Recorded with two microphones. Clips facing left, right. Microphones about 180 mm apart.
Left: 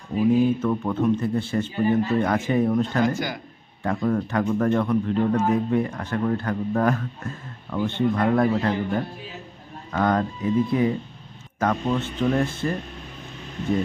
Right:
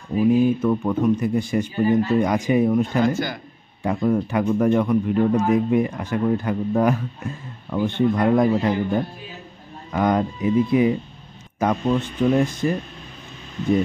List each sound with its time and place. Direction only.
0.6 s a man's voice: 10° right (ahead or behind)